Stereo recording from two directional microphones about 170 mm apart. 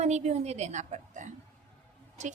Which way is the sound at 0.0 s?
40° right (ahead or behind).